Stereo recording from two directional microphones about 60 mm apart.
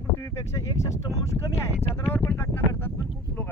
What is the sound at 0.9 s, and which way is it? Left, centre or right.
Speech, left.